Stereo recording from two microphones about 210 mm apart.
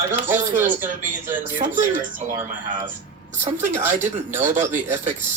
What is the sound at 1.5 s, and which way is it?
Speech, 40° right (ahead or behind).